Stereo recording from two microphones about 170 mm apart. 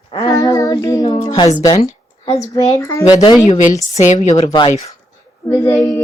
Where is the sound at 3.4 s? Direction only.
45° left (ahead or behind).